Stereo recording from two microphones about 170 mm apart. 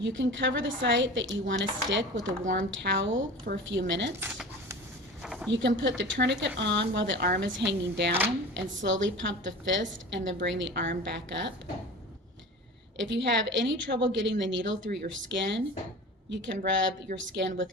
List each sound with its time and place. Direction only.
0.0 s speech: 90° right
2.4 s speech: 50° right (ahead or behind)
2.6 s speech: 90° right
5.2 s a sound: centre (ahead or behind)
5.5 s speech: 90° right
13.1 s speech: 90° right